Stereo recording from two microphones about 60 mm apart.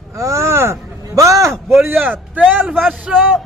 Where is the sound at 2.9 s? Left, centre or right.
Centre.